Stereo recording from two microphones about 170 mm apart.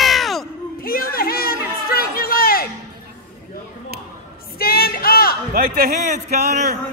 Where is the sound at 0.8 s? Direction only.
60° left (ahead or behind).